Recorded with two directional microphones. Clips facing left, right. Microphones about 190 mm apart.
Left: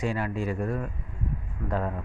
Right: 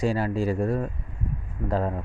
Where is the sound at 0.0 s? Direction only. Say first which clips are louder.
Right 4 dB; 35° right (ahead or behind).